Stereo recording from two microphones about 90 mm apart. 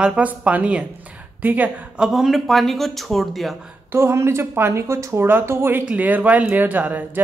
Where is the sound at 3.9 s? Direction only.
30° right (ahead or behind).